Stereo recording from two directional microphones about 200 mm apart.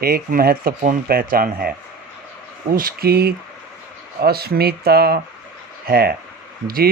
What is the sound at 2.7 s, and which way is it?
Speech, 45° right (ahead or behind).